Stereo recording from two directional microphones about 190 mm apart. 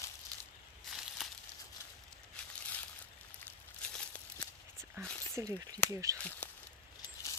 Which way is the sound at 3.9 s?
5° left (ahead or behind).